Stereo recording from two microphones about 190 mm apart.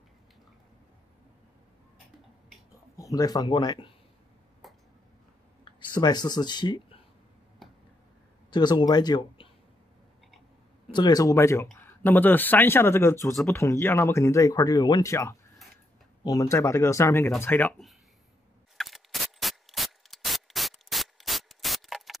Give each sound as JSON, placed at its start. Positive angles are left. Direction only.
{"t": 3.0, "sound": "speech", "side_deg": 20}
{"t": 5.9, "sound": "speech", "side_deg": 20}
{"t": 8.5, "sound": "speech", "side_deg": 25}
{"t": 10.9, "sound": "speech", "side_deg": 20}
{"t": 18.8, "sound": "spray", "side_deg": 0}